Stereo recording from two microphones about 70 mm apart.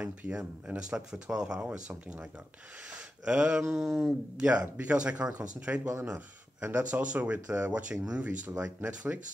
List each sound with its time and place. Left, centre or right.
0.0 s speech: centre
3.0 s speech: centre